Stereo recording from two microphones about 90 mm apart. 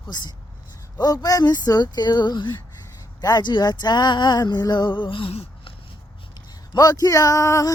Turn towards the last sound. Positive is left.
turn(degrees=35)  # may be behind; listen again after turning